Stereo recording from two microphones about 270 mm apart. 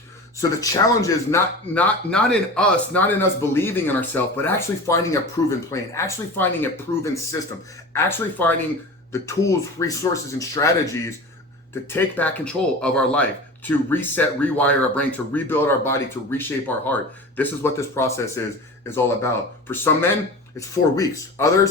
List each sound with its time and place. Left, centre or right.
0.3 s speech: centre